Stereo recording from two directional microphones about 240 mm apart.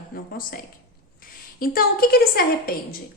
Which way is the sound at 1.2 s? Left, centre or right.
Left.